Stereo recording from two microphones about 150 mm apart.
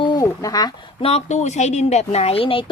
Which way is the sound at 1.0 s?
45° left (ahead or behind).